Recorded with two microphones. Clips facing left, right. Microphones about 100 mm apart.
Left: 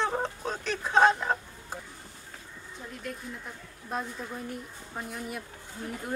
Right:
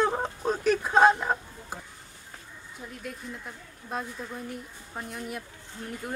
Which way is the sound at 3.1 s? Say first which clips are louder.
Even; 5° right (ahead or behind).